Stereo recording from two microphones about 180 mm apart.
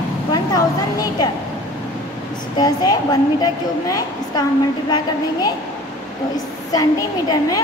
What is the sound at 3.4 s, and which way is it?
A woman's voice, 20° left (ahead or behind).